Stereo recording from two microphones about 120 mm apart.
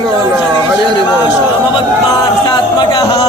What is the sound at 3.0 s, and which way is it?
Music, 30° left (ahead or behind).